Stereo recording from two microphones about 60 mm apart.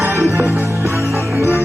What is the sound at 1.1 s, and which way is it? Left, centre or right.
Music, right.